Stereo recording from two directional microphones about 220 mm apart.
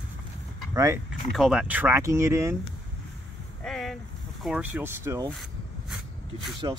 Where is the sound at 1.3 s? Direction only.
Centre (ahead or behind).